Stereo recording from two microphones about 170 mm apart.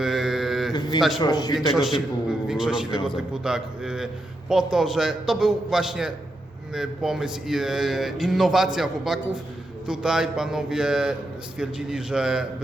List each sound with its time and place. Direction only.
0.0 s mantra: centre (ahead or behind)
0.7 s a sound: 25° left (ahead or behind)
1.2 s a man's voice: 25° left (ahead or behind)
1.5 s a man's voice: centre (ahead or behind)